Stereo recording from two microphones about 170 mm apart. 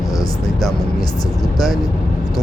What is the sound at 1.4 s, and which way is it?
Speech, centre (ahead or behind).